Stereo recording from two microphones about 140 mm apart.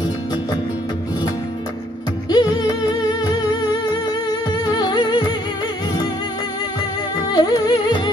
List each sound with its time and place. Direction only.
2.2 s music: 30° left (ahead or behind)
4.5 s music: 30° left (ahead or behind)
7.3 s music: 30° left (ahead or behind)